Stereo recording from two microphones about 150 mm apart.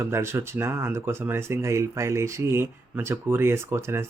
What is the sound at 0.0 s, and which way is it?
Speech, 15° right (ahead or behind).